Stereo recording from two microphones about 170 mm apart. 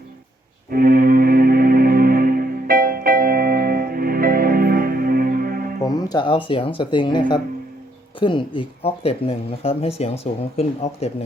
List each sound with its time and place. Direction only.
0.7 s music: 60° right (ahead or behind)
5.8 s speech: 20° left (ahead or behind)